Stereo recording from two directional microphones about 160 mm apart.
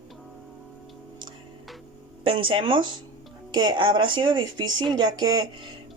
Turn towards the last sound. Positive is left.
turn(degrees=-25)  # may be behind; listen again after turning